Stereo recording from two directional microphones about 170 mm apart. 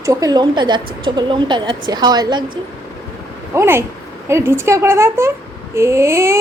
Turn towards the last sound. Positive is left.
turn(degrees=-15)  # may be behind; listen again after turning